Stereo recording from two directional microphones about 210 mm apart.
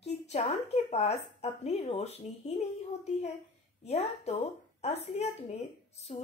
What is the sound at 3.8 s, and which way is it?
A woman's voice, 30° left (ahead or behind).